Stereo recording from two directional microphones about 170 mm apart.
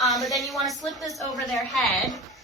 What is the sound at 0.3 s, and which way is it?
Speech, centre (ahead or behind).